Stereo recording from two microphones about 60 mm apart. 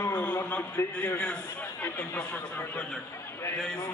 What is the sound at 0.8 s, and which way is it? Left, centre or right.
Speech, left.